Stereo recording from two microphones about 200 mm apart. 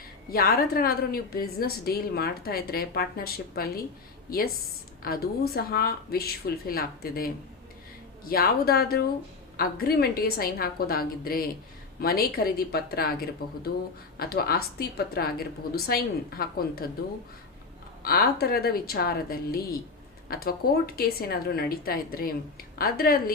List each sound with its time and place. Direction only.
0.3 s a woman's voice: 50° left (ahead or behind)
18.0 s a woman's voice: 50° left (ahead or behind)